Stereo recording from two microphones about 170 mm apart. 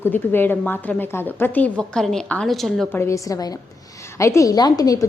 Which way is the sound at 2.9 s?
15° left (ahead or behind).